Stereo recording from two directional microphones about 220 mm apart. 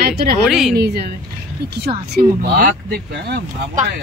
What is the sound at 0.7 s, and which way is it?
Speech, 45° right (ahead or behind).